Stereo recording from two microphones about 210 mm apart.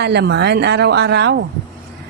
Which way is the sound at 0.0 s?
55° right (ahead or behind).